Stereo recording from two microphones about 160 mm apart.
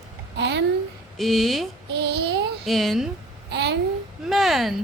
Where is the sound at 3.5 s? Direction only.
90° right.